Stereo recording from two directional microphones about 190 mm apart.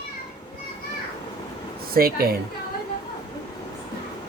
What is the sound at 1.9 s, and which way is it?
Speech, 50° right (ahead or behind).